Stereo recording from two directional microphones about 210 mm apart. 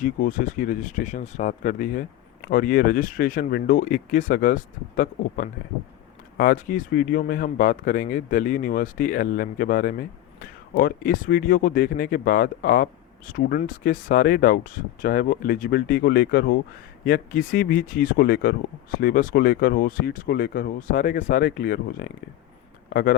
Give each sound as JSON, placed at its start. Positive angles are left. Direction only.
{"t": 0.0, "sound": "speech", "side_deg": 40}